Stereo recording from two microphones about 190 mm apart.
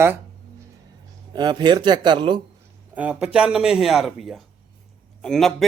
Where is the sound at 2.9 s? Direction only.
5° right (ahead or behind).